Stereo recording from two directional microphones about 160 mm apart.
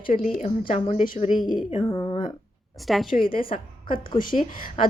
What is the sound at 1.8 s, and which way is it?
Speech, 20° left (ahead or behind).